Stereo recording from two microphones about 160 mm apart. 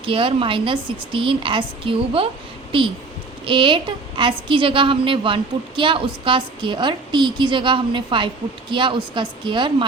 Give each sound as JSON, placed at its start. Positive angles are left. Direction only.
{"t": 0.0, "sound": "a woman's voice", "side_deg": -35}
{"t": 3.4, "sound": "a woman's voice", "side_deg": -30}